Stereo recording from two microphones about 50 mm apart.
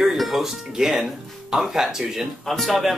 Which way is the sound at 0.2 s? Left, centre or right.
Centre.